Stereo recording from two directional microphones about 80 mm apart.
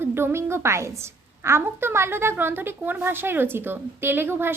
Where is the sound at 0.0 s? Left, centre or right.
Right.